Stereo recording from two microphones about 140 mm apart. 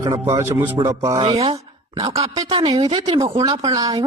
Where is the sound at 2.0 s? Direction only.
25° right (ahead or behind).